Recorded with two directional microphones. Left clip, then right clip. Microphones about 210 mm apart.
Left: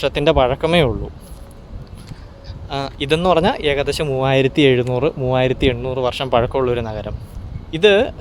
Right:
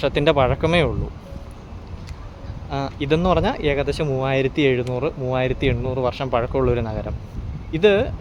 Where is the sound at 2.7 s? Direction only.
30° left (ahead or behind).